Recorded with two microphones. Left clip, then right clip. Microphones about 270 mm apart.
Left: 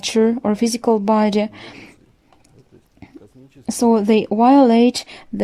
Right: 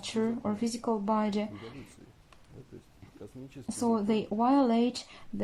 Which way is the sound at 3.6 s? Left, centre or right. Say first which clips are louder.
Left 14 dB; left.